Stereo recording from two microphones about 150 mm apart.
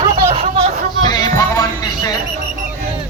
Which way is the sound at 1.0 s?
25° left (ahead or behind).